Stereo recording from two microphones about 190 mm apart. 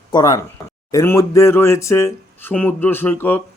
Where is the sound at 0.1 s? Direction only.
20° left (ahead or behind).